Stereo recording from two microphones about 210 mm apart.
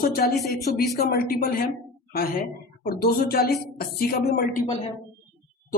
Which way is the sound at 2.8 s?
45° left (ahead or behind).